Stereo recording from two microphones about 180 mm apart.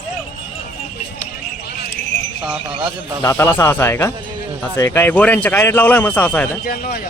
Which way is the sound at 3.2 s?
15° left (ahead or behind).